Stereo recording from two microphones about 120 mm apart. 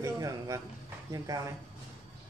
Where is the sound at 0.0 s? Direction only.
25° right (ahead or behind).